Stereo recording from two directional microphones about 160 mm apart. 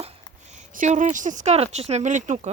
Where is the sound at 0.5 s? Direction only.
50° right (ahead or behind).